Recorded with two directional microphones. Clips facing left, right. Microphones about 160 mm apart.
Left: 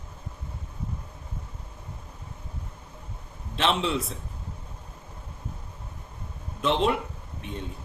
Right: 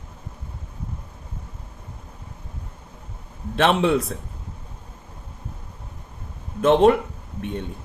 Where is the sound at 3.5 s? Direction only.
55° right (ahead or behind).